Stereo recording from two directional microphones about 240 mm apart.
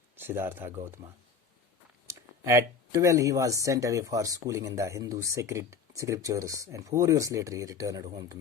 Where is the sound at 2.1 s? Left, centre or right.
Centre.